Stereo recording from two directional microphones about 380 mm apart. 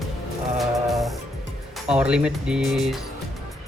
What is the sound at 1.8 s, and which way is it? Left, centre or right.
Speech, centre.